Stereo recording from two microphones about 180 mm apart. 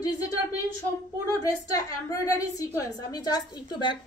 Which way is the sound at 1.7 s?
20° left (ahead or behind).